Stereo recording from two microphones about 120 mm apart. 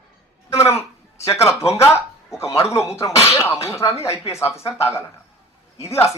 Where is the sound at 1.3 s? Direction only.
25° left (ahead or behind).